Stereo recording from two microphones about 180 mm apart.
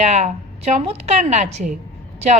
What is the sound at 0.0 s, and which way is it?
A woman's voice, 40° right (ahead or behind).